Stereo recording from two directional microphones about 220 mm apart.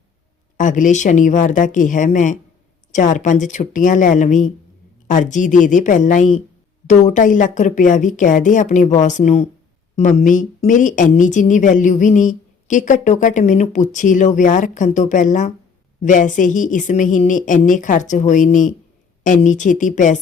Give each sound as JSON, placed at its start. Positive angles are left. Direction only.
{"t": 0.5, "sound": "a woman's voice", "side_deg": 35}